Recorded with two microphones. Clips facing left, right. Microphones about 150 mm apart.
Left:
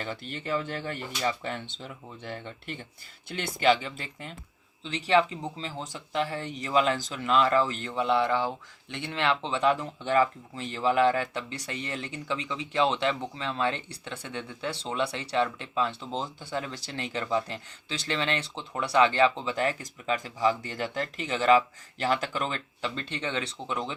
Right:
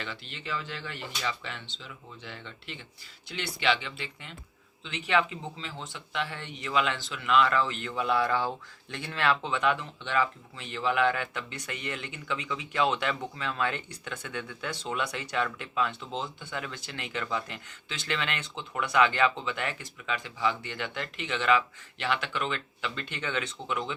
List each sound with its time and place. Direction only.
0.0 s speech: 45° left (ahead or behind)